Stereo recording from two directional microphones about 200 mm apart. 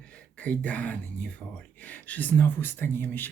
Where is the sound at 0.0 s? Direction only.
5° left (ahead or behind).